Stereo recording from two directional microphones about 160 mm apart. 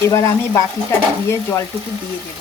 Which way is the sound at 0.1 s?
20° left (ahead or behind).